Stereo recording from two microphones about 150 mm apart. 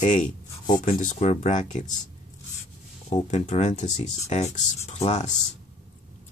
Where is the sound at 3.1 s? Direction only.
50° left (ahead or behind).